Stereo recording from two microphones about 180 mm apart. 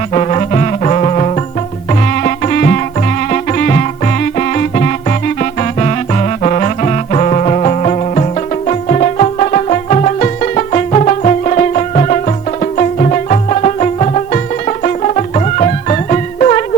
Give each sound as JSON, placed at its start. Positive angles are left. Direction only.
{"t": 0.1, "sound": "music", "side_deg": 35}
{"t": 2.2, "sound": "music", "side_deg": 45}